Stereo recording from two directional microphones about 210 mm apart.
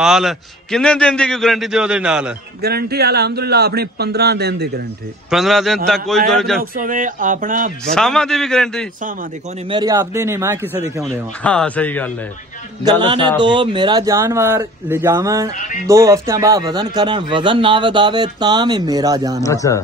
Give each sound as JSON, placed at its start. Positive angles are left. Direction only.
{"t": 0.0, "sound": "a man's voice", "side_deg": 0}
{"t": 2.6, "sound": "a man's voice", "side_deg": -50}
{"t": 5.3, "sound": "a man's voice", "side_deg": 0}
{"t": 6.6, "sound": "speech", "side_deg": -40}
{"t": 7.9, "sound": "a man's voice", "side_deg": 5}
{"t": 9.7, "sound": "speech", "side_deg": -20}
{"t": 11.4, "sound": "speech", "side_deg": 5}
{"t": 13.4, "sound": "speech", "side_deg": -20}
{"t": 15.5, "sound": "speech", "side_deg": 35}
{"t": 15.9, "sound": "speech", "side_deg": -15}
{"t": 19.4, "sound": "speech", "side_deg": 15}